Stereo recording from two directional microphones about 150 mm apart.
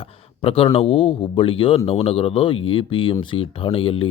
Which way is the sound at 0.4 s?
40° left (ahead or behind).